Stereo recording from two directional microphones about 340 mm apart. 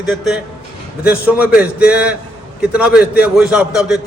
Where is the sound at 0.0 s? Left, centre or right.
Centre.